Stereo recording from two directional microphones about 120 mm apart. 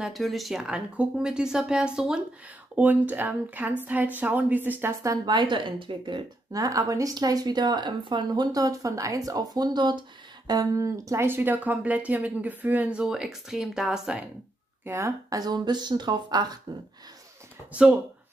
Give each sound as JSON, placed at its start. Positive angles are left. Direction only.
{"t": 0.0, "sound": "speech", "side_deg": 0}
{"t": 5.0, "sound": "a woman's voice", "side_deg": -35}
{"t": 14.9, "sound": "speech", "side_deg": -20}